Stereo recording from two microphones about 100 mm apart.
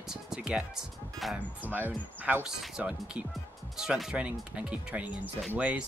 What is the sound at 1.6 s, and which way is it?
Speech, 20° right (ahead or behind).